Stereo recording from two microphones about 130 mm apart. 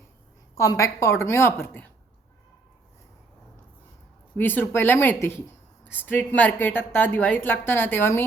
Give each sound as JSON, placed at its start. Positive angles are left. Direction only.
{"t": 0.5, "sound": "a woman's voice", "side_deg": 25}
{"t": 4.4, "sound": "a woman's voice", "side_deg": 15}